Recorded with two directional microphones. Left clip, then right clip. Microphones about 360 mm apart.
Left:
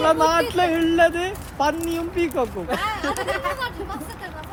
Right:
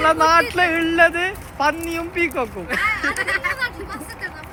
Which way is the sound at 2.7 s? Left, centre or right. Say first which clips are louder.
Right 4 dB; centre.